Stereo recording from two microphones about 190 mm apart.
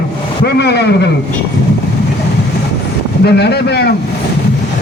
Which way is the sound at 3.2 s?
60° left (ahead or behind).